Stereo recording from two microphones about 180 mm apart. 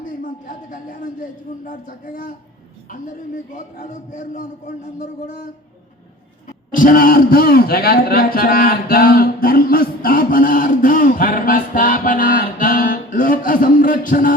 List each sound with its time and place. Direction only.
0.0 s a sound: 50° left (ahead or behind)
1.6 s a man's voice: 45° left (ahead or behind)
6.7 s a man's voice: 50° left (ahead or behind)